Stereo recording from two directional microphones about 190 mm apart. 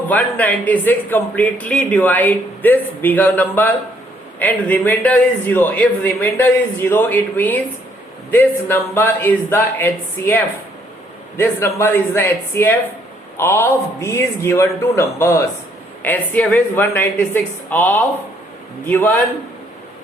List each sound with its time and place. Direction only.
0.1 s speech: 10° left (ahead or behind)